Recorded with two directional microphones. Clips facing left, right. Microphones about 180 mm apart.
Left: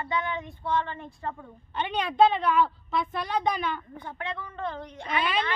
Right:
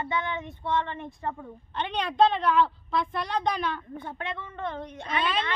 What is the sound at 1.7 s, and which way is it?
Speech, 5° left (ahead or behind).